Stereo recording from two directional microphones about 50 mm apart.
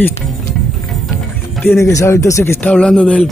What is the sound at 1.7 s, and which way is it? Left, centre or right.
Speech, left.